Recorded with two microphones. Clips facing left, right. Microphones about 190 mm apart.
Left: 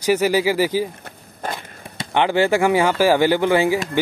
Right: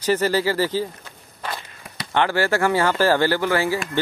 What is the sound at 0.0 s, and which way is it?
Speech, 10° left (ahead or behind).